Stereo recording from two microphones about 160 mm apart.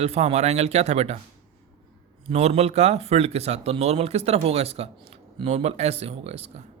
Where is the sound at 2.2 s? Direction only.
40° right (ahead or behind).